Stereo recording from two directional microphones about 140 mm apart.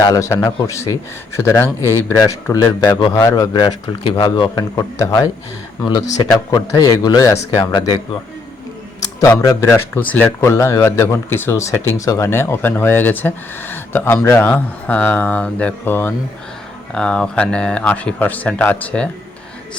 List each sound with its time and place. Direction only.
0.0 s a man's voice: 25° left (ahead or behind)
4.7 s a man's voice: 25° left (ahead or behind)
9.2 s speech: 25° left (ahead or behind)